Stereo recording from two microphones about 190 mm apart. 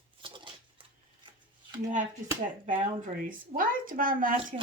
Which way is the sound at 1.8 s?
40° right (ahead or behind).